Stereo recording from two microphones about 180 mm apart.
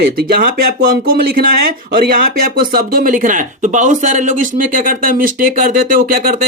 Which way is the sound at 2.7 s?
50° right (ahead or behind).